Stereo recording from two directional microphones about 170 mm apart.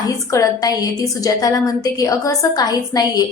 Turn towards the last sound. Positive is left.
turn(degrees=20)  # may be behind; listen again after turning